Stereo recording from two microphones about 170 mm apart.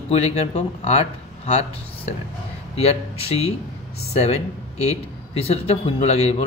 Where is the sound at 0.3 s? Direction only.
40° left (ahead or behind).